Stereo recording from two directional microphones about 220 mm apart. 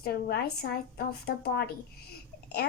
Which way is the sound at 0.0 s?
45° left (ahead or behind).